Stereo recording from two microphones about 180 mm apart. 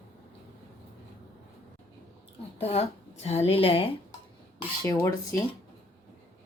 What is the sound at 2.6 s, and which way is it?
A woman's voice, 35° left (ahead or behind).